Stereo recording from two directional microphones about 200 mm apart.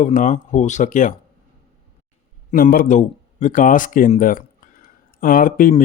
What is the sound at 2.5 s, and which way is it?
Speech, 40° left (ahead or behind).